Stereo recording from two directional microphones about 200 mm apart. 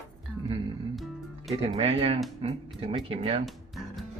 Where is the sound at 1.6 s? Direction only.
30° right (ahead or behind).